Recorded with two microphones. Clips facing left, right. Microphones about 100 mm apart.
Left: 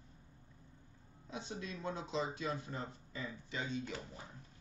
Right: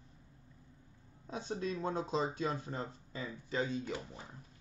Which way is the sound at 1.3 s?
40° right (ahead or behind).